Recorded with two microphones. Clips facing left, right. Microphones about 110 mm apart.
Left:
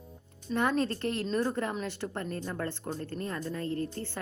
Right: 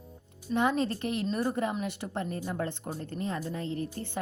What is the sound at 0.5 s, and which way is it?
Speech, 15° right (ahead or behind).